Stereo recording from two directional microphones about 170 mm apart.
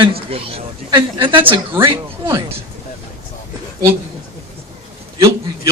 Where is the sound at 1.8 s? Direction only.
25° right (ahead or behind).